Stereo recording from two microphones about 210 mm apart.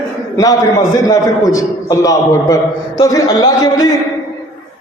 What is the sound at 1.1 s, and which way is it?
A man's voice, 15° left (ahead or behind).